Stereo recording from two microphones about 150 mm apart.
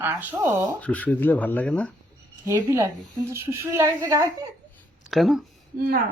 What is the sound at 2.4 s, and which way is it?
A woman's voice, 25° right (ahead or behind).